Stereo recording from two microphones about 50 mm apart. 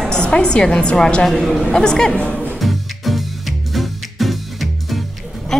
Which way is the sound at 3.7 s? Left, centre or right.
Centre.